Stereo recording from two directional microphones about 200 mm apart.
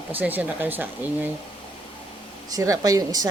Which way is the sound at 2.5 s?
15° right (ahead or behind).